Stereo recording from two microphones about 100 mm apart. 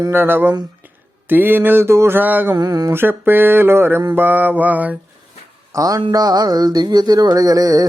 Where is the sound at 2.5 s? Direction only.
40° right (ahead or behind).